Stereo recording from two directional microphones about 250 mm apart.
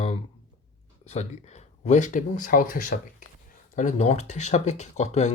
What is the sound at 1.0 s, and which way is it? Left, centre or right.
Speech, left.